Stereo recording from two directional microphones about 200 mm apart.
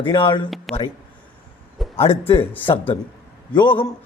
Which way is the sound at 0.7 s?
Centre (ahead or behind).